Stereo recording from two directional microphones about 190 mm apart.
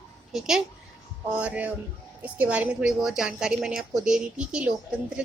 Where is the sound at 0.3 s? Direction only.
Centre (ahead or behind).